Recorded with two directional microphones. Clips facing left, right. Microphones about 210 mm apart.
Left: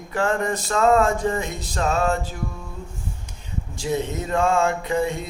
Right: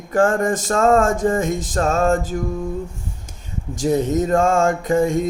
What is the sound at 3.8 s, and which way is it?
Mantra, 45° right (ahead or behind).